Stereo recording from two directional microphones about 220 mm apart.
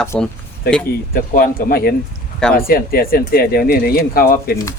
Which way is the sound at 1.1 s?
40° left (ahead or behind).